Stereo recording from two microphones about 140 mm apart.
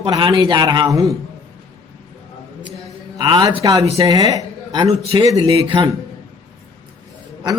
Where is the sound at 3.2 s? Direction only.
30° right (ahead or behind).